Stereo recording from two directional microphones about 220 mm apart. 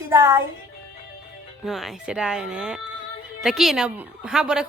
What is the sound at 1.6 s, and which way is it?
A woman's voice, centre (ahead or behind).